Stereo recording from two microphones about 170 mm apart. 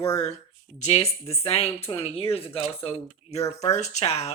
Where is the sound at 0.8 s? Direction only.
40° left (ahead or behind).